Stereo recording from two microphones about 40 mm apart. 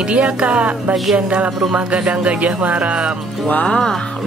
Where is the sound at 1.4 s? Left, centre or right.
Centre.